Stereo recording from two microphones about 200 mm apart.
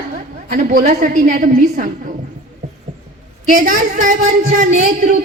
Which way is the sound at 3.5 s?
40° right (ahead or behind).